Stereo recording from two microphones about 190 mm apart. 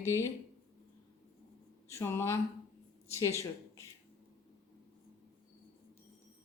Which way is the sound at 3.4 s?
15° left (ahead or behind).